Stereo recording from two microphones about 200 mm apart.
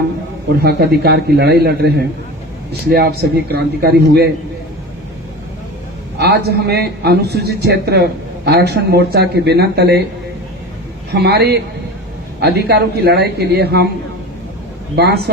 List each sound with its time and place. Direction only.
0.6 s a man's voice: 55° right (ahead or behind)
6.1 s a man's voice: 55° right (ahead or behind)
11.1 s speech: 55° right (ahead or behind)
14.9 s a man's voice: 55° right (ahead or behind)